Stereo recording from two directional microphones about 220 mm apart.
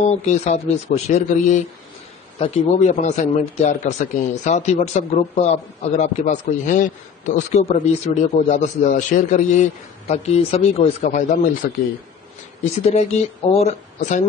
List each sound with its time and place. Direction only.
0.2 s speech: 30° left (ahead or behind)
12.8 s speech: 30° left (ahead or behind)